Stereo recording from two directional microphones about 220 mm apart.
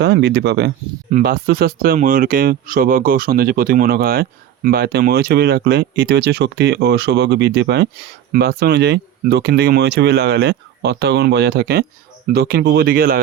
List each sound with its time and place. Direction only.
0.0 s speech: 50° right (ahead or behind)